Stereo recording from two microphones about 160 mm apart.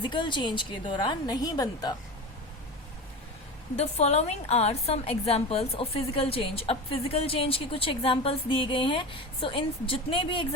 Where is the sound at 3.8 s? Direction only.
40° left (ahead or behind).